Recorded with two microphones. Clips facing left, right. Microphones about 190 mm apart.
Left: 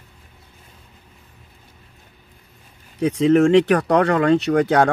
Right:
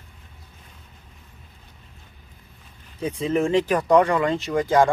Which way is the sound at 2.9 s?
75° left (ahead or behind).